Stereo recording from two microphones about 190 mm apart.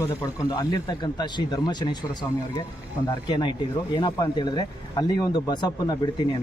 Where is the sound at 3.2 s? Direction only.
20° left (ahead or behind).